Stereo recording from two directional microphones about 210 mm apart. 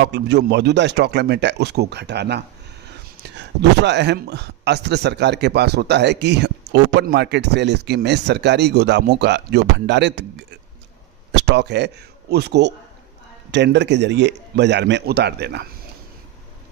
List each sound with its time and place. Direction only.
0.0 s a man's voice: 55° right (ahead or behind)